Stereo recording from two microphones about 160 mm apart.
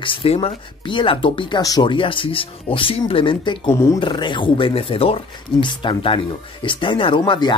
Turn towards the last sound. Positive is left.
turn(degrees=30)  # may be behind; listen again after turning